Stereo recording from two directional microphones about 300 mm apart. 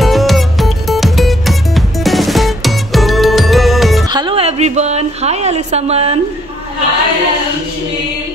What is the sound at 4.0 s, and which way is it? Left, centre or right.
Music, centre.